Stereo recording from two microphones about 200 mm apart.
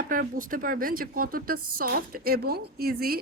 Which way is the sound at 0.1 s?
45° right (ahead or behind).